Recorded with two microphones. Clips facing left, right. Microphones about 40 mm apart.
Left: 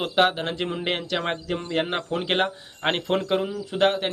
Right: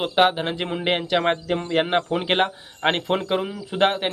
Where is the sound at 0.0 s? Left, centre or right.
Centre.